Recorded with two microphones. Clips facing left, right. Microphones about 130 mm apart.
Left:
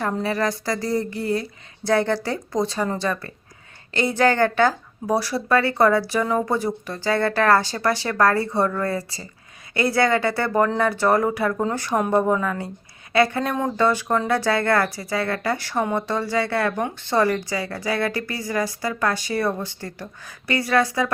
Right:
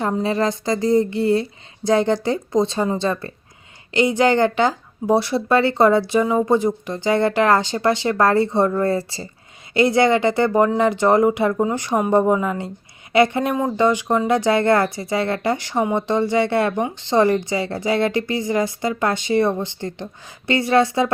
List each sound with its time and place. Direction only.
0.0 s speech: 20° right (ahead or behind)